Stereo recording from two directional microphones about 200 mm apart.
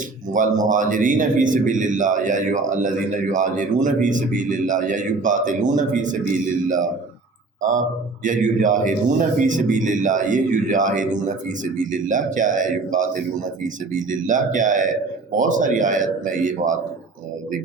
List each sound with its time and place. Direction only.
0.3 s a man's voice: 40° right (ahead or behind)
8.2 s a man's voice: 40° right (ahead or behind)